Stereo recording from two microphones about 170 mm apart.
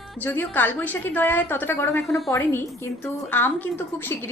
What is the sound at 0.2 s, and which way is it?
A woman's voice, 10° left (ahead or behind).